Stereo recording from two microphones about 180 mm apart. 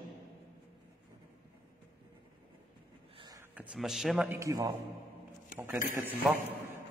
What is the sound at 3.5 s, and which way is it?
Speech, centre (ahead or behind).